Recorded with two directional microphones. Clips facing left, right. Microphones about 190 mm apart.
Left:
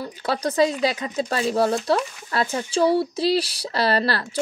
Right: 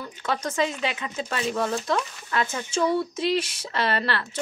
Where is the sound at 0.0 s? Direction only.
35° left (ahead or behind).